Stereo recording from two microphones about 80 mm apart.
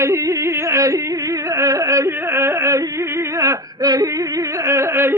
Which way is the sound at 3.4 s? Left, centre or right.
Right.